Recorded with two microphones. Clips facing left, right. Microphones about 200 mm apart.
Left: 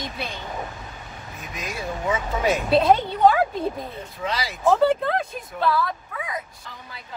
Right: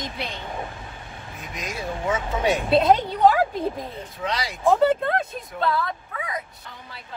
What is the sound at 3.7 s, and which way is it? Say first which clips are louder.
Speech: even; centre (ahead or behind).